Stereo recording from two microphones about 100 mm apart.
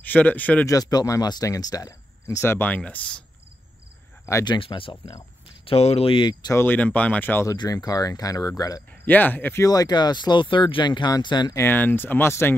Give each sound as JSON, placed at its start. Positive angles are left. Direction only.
{"t": 0.0, "sound": "speech", "side_deg": 15}
{"t": 0.7, "sound": "speech", "side_deg": 35}
{"t": 2.7, "sound": "speech", "side_deg": 15}
{"t": 4.5, "sound": "speech", "side_deg": 60}
{"t": 5.7, "sound": "speech", "side_deg": 85}
{"t": 6.5, "sound": "speech", "side_deg": 20}
{"t": 7.5, "sound": "speech", "side_deg": 40}
{"t": 9.0, "sound": "speech", "side_deg": 20}
{"t": 9.7, "sound": "speech", "side_deg": 40}
{"t": 11.5, "sound": "speech", "side_deg": 20}